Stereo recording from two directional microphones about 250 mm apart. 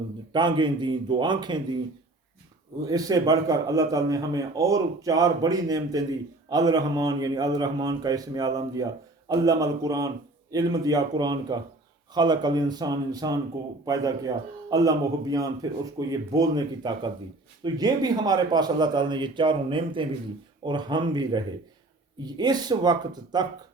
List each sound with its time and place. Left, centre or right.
0.3 s a man's voice: centre
2.8 s a man's voice: centre